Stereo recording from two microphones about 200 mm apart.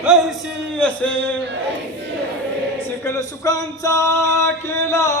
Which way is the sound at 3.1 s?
15° left (ahead or behind).